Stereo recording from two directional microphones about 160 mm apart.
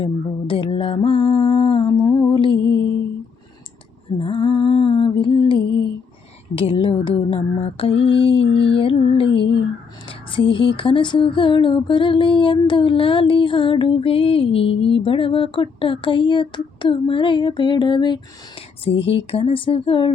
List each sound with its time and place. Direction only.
0.0 s music: 35° left (ahead or behind)
4.2 s music: 35° left (ahead or behind)
6.6 s a sound: 35° left (ahead or behind)